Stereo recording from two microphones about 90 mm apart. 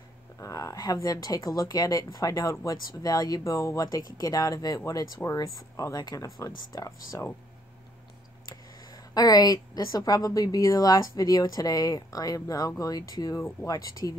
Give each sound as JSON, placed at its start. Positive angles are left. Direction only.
{"t": 0.4, "sound": "speech", "side_deg": 40}
{"t": 8.5, "sound": "speech", "side_deg": 45}